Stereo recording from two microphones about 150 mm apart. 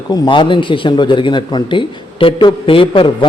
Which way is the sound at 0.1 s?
35° left (ahead or behind).